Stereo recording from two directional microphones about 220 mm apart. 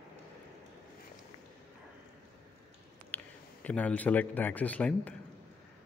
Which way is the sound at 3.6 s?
5° left (ahead or behind).